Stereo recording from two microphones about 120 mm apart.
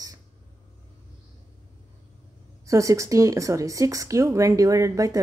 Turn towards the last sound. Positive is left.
turn(degrees=-30)  # may be behind; listen again after turning